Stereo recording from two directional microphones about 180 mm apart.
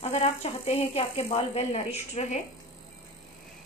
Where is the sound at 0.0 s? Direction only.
35° left (ahead or behind).